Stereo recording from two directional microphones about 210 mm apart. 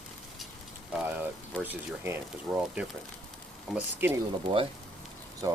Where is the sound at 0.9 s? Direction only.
10° right (ahead or behind).